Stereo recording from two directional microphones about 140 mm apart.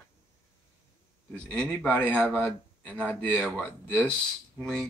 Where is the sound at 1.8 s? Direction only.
10° left (ahead or behind).